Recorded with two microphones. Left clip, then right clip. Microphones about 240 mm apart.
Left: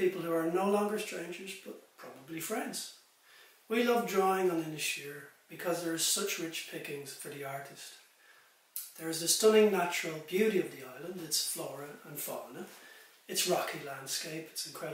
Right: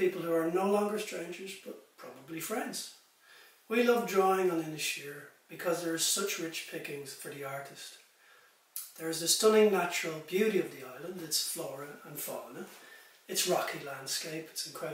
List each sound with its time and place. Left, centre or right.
0.0 s speech: centre
8.9 s speech: centre